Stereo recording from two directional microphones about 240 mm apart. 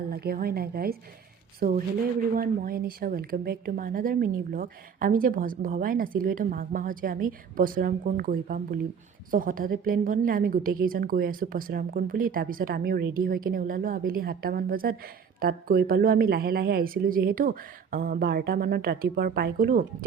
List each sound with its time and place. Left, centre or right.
0.1 s a woman's voice: right